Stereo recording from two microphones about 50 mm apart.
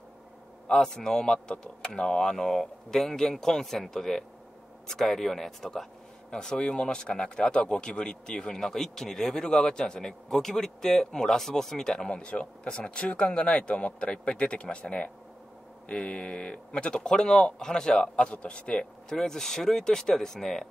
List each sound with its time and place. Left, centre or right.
0.7 s a man's voice: centre